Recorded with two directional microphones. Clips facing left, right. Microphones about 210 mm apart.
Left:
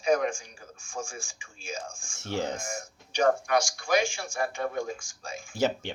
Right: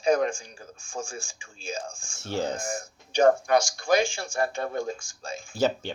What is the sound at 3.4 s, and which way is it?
Speech, 25° right (ahead or behind).